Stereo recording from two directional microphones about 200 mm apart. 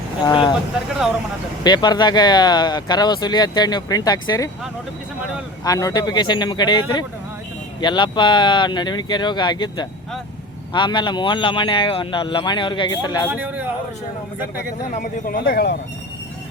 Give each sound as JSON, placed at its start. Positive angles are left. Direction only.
{"t": 0.3, "sound": "speech", "side_deg": 20}
{"t": 1.6, "sound": "speech", "side_deg": 20}
{"t": 5.6, "sound": "speech", "side_deg": 15}
{"t": 13.3, "sound": "a man's voice", "side_deg": -10}
{"t": 14.8, "sound": "a man's voice", "side_deg": 45}